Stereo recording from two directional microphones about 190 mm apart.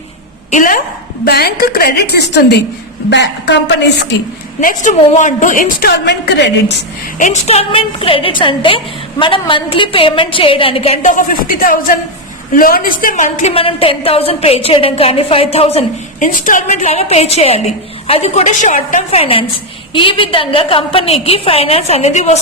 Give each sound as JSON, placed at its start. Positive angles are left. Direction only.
{"t": 0.5, "sound": "a woman's voice", "side_deg": 45}
{"t": 4.6, "sound": "a woman's voice", "side_deg": 45}
{"t": 7.2, "sound": "a woman's voice", "side_deg": 40}
{"t": 13.5, "sound": "a woman's voice", "side_deg": 30}
{"t": 16.2, "sound": "a woman's voice", "side_deg": 45}